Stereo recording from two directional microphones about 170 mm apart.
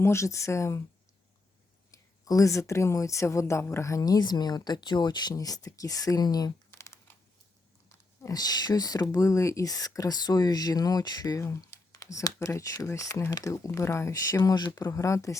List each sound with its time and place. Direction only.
0.0 s speech: 15° left (ahead or behind)
1.9 s speech: 20° left (ahead or behind)
6.7 s computer keyboard: 15° left (ahead or behind)
8.2 s speech: 20° left (ahead or behind)